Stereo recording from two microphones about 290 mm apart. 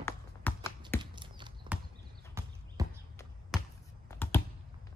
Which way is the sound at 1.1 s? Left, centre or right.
Centre.